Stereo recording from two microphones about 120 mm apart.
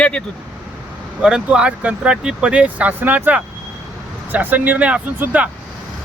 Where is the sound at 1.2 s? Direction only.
5° right (ahead or behind).